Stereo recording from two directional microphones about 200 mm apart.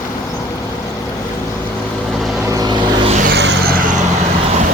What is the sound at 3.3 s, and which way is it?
Vehicle, 55° right (ahead or behind).